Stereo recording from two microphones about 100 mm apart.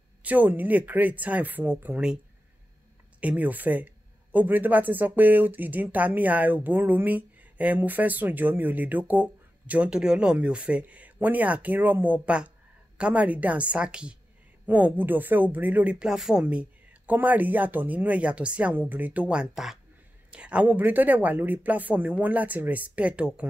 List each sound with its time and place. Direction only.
0.2 s speech: 15° right (ahead or behind)
3.2 s speech: 15° right (ahead or behind)
19.5 s speech: 5° right (ahead or behind)